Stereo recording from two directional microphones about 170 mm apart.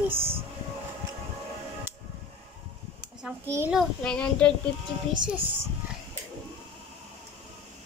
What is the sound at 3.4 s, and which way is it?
Speech, 15° right (ahead or behind).